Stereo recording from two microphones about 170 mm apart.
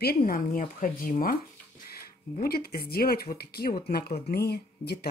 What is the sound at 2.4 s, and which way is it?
Speech, 60° left (ahead or behind).